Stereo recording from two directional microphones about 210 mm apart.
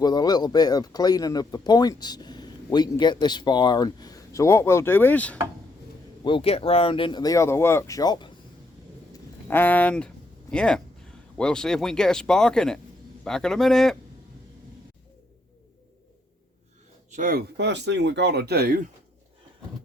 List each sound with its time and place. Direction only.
0.0 s speech: 20° left (ahead or behind)
6.2 s speech: 25° left (ahead or behind)
9.5 s speech: 10° left (ahead or behind)
17.1 s speech: 40° right (ahead or behind)